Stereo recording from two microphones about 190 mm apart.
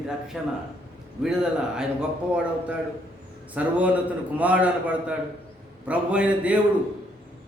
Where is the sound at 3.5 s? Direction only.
5° right (ahead or behind).